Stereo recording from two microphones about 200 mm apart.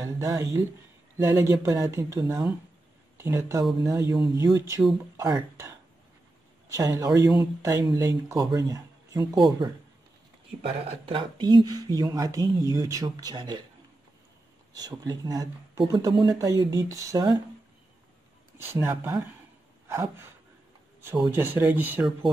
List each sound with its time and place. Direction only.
0.0 s speech: 15° right (ahead or behind)
6.7 s speech: 15° right (ahead or behind)
10.9 s speech: 25° right (ahead or behind)
14.7 s speech: 20° right (ahead or behind)
18.6 s speech: 10° right (ahead or behind)